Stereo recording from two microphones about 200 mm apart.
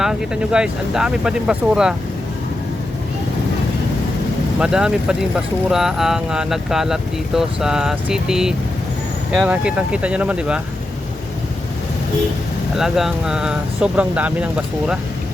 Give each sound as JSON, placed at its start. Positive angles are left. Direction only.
{"t": 0.0, "sound": "speech", "side_deg": -5}
{"t": 4.6, "sound": "speech", "side_deg": -5}
{"t": 12.7, "sound": "speech", "side_deg": 0}